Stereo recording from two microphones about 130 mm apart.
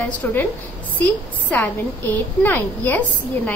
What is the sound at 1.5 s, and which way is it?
A woman's voice, 15° left (ahead or behind).